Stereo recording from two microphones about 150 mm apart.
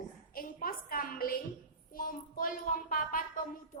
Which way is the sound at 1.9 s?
70° left (ahead or behind).